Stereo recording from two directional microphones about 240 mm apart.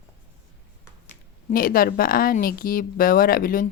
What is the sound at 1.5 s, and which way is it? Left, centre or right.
A woman's voice, left.